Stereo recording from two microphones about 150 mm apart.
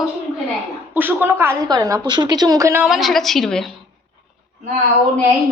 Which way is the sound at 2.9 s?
Centre (ahead or behind).